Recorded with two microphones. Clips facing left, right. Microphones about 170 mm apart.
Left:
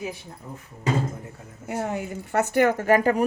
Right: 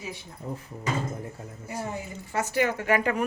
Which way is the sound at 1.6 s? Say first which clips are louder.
Left 6 dB; 80° left.